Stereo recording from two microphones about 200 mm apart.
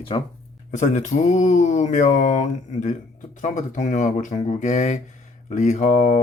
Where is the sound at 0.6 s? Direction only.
40° left (ahead or behind).